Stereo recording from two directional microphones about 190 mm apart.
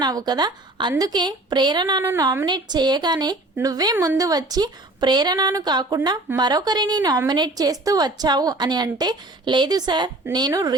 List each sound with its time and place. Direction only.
0.0 s a woman's voice: 20° right (ahead or behind)